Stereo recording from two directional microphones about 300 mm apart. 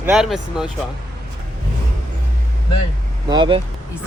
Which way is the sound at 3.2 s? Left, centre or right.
Centre.